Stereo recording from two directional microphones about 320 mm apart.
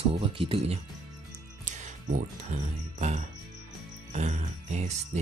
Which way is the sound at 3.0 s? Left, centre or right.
Right.